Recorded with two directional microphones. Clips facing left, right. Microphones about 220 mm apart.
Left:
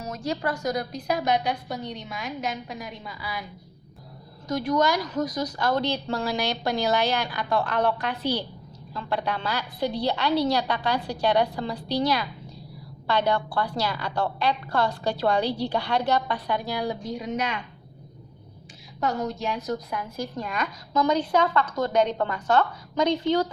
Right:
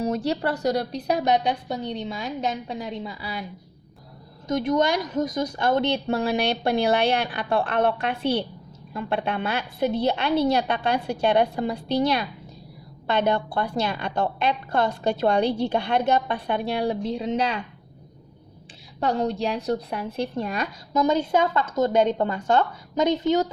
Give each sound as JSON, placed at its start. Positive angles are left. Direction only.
{"t": 0.0, "sound": "a woman's voice", "side_deg": -35}
{"t": 4.4, "sound": "a woman's voice", "side_deg": -25}
{"t": 18.9, "sound": "a woman's voice", "side_deg": -30}